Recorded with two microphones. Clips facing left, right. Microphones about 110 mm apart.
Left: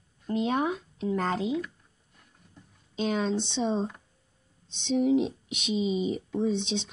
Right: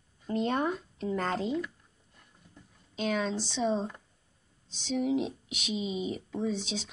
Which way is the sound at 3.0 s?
30° left (ahead or behind).